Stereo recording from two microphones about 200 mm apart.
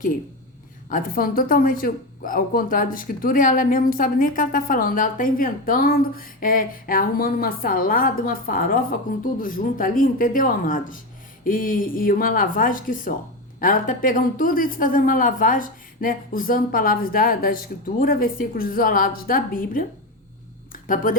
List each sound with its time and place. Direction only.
0.9 s a woman's voice: 45° left (ahead or behind)